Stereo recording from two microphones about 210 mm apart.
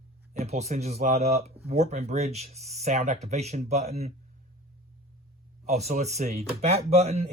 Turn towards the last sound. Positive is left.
turn(degrees=-30)  # may be behind; listen again after turning